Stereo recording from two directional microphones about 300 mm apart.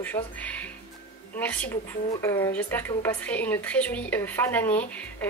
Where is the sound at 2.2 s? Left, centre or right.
Centre.